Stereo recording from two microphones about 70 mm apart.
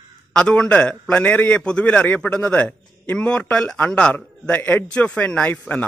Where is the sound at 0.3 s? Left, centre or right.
Centre.